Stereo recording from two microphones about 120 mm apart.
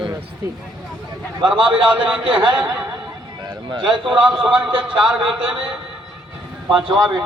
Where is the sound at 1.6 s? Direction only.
45° right (ahead or behind).